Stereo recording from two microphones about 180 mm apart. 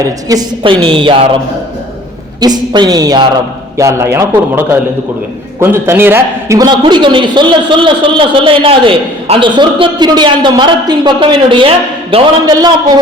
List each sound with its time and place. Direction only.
0.0 s a man's voice: 20° right (ahead or behind)
2.4 s a man's voice: 25° right (ahead or behind)